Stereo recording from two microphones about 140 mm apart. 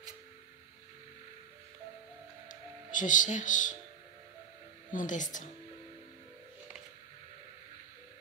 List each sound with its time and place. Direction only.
2.4 s music: 70° left (ahead or behind)
4.9 s a woman's voice: 65° left (ahead or behind)